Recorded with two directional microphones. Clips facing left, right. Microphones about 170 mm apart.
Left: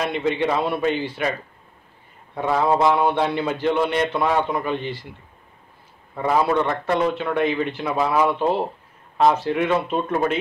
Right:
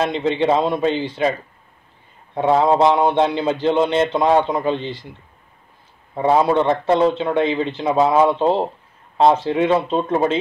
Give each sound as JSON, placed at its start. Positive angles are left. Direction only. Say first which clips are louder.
{"t": 0.2, "sound": "a man's voice", "louder": "right 4 dB", "side_deg": -25}
{"t": 2.3, "sound": "a man's voice", "louder": "right 4 dB", "side_deg": -25}
{"t": 6.1, "sound": "a man's voice", "louder": "right 4 dB", "side_deg": -25}